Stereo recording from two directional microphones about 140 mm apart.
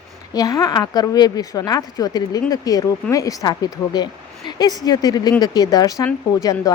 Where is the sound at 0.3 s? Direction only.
25° left (ahead or behind).